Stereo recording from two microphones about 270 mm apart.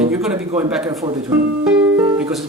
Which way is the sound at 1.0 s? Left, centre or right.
Centre.